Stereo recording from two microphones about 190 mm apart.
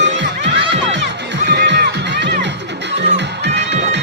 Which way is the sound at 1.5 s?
60° right (ahead or behind).